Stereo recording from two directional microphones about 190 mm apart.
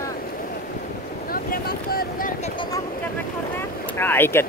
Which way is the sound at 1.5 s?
50° left (ahead or behind).